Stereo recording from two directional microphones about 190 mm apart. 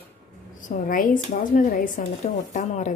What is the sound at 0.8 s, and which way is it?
Speech, 45° left (ahead or behind).